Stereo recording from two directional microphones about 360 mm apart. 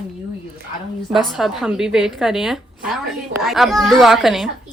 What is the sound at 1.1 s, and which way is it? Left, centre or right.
A woman's voice, centre.